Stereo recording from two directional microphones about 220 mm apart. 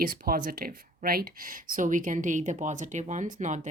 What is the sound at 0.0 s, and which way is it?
Speech, 40° right (ahead or behind).